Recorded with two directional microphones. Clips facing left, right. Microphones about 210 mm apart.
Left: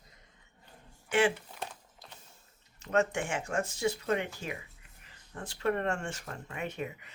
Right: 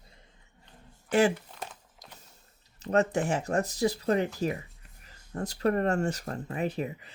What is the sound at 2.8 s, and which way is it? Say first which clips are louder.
Speech: right 4 dB; 35° right (ahead or behind).